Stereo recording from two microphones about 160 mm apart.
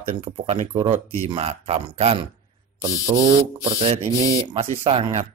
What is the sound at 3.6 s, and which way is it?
Speech, 40° right (ahead or behind).